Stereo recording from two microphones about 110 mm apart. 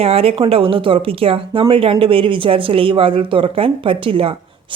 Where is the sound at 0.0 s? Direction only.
65° right (ahead or behind).